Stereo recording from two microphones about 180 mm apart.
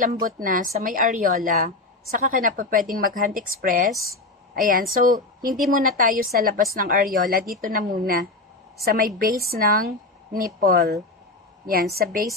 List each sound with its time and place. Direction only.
0.0 s a woman's voice: 50° right (ahead or behind)